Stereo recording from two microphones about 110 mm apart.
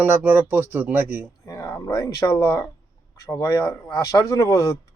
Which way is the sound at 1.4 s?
30° left (ahead or behind).